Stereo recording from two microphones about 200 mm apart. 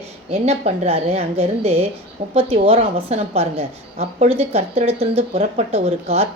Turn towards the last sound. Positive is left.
turn(degrees=-30)  # may be behind; listen again after turning